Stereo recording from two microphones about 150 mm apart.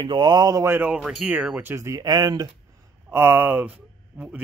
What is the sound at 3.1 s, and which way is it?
Speech, 15° right (ahead or behind).